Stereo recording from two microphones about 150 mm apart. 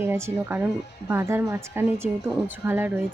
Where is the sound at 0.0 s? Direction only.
15° right (ahead or behind).